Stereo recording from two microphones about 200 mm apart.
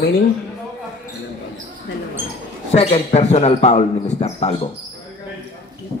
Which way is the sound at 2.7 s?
30° left (ahead or behind).